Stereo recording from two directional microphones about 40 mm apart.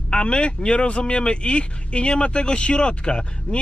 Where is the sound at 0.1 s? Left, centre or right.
Left.